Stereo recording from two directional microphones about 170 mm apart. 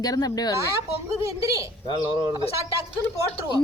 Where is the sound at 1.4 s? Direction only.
20° right (ahead or behind).